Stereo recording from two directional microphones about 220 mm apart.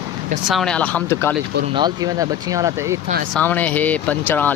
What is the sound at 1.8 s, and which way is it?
Speech, 20° right (ahead or behind).